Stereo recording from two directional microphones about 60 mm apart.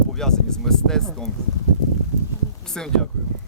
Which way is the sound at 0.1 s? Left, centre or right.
Centre.